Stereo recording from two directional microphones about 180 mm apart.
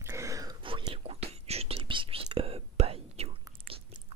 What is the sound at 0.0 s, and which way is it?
Whispering, 15° right (ahead or behind).